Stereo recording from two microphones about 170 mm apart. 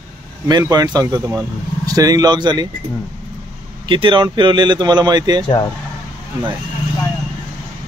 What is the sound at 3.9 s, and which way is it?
Speech, 30° right (ahead or behind).